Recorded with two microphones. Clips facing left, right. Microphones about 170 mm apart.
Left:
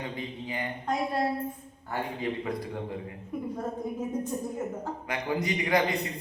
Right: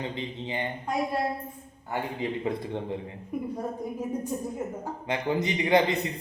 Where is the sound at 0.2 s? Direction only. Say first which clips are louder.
Right 2 dB; 25° right (ahead or behind).